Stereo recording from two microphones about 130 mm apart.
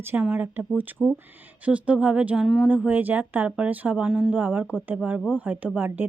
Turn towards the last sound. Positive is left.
turn(degrees=-15)  # may be behind; listen again after turning